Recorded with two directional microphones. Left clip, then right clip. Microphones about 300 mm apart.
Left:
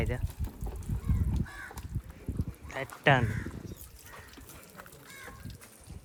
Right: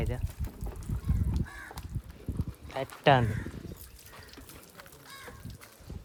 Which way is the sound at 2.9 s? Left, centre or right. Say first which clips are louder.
Right 2 dB; centre.